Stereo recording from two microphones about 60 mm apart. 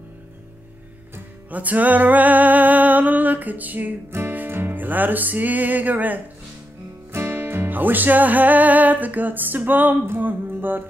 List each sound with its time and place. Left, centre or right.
1.5 s music: right
4.1 s music: right
7.1 s music: right